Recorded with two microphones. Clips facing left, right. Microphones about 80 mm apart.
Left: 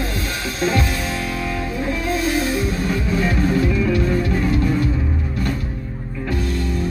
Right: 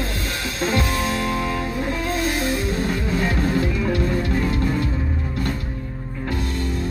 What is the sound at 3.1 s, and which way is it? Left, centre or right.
Music, right.